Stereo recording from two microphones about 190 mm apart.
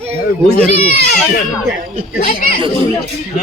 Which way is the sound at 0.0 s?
35° right (ahead or behind).